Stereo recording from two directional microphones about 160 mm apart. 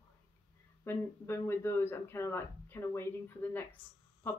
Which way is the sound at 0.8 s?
15° left (ahead or behind).